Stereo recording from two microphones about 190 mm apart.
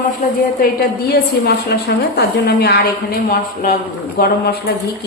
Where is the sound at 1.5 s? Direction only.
60° left (ahead or behind).